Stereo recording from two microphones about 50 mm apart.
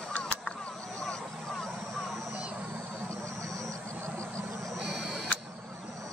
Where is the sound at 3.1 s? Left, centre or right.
Right.